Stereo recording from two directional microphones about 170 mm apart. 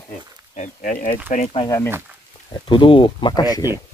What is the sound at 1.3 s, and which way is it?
Speech, 35° left (ahead or behind).